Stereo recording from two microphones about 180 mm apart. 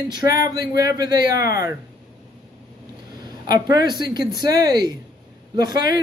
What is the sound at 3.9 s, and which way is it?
Speech, 25° right (ahead or behind).